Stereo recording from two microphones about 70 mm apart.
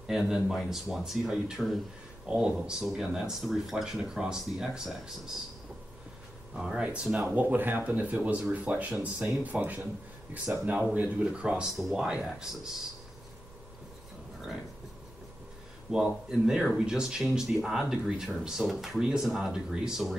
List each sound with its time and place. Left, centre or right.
0.0 s speech: centre
6.5 s speech: centre
11.7 s speech: centre
15.9 s speech: centre